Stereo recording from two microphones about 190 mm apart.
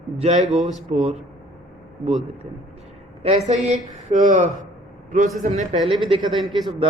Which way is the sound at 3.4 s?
35° right (ahead or behind).